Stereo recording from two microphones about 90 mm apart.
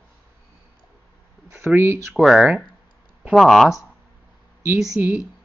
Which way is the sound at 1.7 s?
25° right (ahead or behind).